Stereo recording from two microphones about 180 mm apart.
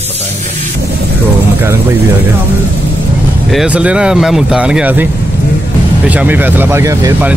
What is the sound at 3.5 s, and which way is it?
Speech, 5° right (ahead or behind).